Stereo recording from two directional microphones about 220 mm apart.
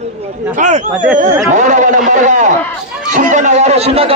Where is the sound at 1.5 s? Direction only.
35° right (ahead or behind).